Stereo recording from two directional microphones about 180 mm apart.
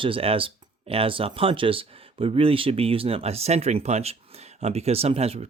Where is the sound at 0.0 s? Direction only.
30° right (ahead or behind).